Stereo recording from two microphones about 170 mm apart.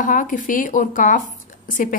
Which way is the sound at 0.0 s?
50° left (ahead or behind).